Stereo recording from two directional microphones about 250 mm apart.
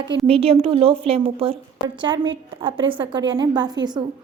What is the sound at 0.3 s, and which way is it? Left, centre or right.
A woman's voice, right.